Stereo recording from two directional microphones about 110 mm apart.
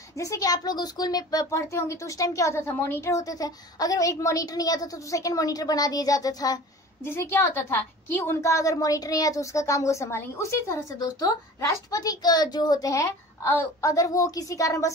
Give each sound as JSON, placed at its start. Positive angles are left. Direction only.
{"t": 0.2, "sound": "speech", "side_deg": 30}
{"t": 7.1, "sound": "a woman's voice", "side_deg": 20}